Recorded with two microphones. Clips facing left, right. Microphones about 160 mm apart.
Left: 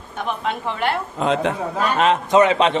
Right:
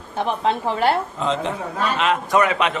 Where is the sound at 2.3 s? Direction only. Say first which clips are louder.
Left 5 dB; 25° left (ahead or behind).